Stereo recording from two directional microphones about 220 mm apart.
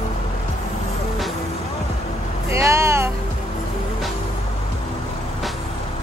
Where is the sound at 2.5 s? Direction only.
15° right (ahead or behind).